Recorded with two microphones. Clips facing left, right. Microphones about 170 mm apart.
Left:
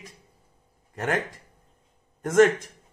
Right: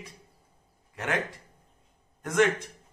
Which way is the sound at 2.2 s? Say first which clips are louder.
Left 6 dB; 45° left (ahead or behind).